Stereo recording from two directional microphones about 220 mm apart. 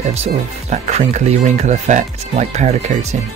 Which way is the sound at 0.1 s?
30° right (ahead or behind).